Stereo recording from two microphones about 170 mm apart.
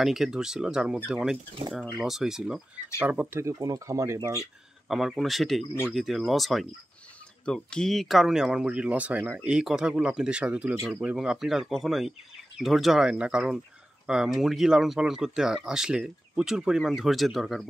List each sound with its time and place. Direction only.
0.0 s speech: 5° right (ahead or behind); by 4.5 s 20° right (ahead or behind)
4.8 s speech: centre (ahead or behind)